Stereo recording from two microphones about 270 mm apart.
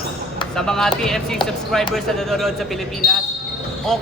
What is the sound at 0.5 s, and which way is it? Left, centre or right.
A man's voice, centre.